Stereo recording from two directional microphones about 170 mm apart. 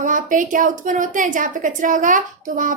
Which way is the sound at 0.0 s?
50° right (ahead or behind).